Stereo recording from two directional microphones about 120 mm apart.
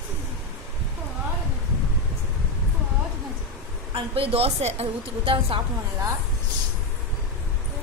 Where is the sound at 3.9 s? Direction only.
50° right (ahead or behind).